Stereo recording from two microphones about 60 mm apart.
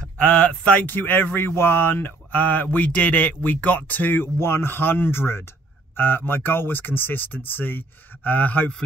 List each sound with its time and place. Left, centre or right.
0.2 s speech: centre